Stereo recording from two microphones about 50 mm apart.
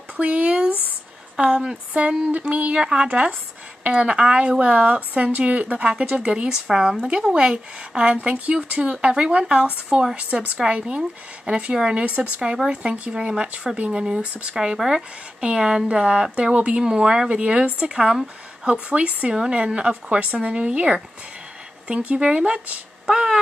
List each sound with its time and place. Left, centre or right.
0.2 s a woman's voice: right
16.5 s a woman's voice: right
18.9 s a woman's voice: right; by 23.4 s centre